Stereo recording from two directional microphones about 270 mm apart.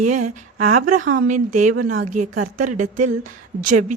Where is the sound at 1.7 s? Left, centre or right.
Right.